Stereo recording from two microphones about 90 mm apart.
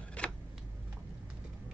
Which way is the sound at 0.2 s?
15° left (ahead or behind).